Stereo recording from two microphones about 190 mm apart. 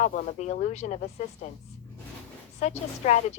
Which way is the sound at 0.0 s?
40° left (ahead or behind).